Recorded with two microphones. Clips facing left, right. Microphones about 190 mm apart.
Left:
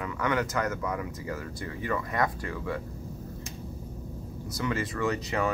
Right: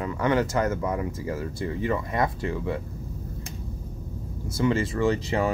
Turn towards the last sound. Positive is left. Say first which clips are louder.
# right 4 dB
turn(degrees=-30)  # may be behind; listen again after turning